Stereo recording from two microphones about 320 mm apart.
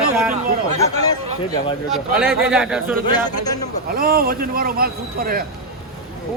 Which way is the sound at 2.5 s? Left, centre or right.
Centre.